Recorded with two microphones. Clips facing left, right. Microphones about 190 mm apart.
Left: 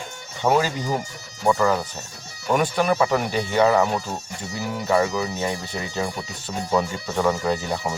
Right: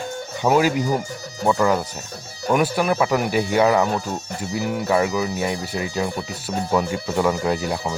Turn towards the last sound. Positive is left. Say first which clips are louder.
# right 2 dB
turn(degrees=-10)  # may be behind; listen again after turning